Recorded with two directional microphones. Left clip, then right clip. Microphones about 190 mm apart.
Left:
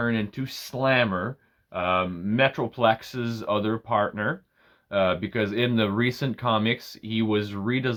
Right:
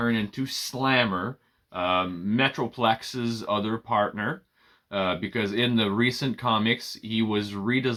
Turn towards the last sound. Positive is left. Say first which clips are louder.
# right 1 dB
turn(degrees=45)  # may be behind; listen again after turning